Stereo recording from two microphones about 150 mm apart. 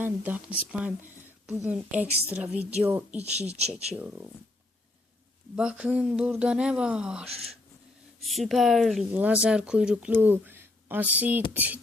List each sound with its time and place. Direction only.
0.0 s speech: 10° right (ahead or behind)
3.2 s speech: 45° right (ahead or behind)
3.9 s speech: 10° right (ahead or behind)
5.5 s speech: 5° right (ahead or behind)